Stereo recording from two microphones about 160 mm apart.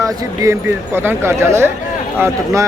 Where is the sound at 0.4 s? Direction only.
20° right (ahead or behind).